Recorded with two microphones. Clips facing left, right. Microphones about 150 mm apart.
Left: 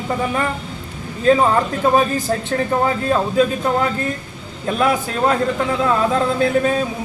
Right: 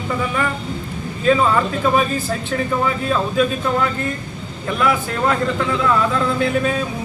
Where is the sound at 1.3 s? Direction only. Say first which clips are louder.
Left 2 dB; 35° left (ahead or behind).